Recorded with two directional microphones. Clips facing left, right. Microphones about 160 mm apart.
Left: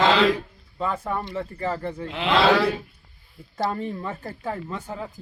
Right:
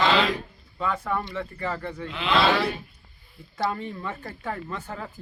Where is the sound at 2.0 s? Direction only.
65° left (ahead or behind).